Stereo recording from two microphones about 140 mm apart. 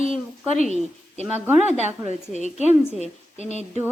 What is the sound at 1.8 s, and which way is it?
A woman's voice, 60° left (ahead or behind).